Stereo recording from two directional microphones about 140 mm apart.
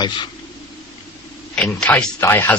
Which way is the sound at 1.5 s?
10° left (ahead or behind).